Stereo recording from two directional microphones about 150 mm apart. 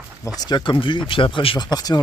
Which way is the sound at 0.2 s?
25° left (ahead or behind).